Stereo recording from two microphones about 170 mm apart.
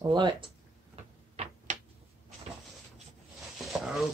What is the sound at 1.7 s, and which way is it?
Tick-tock, 45° right (ahead or behind).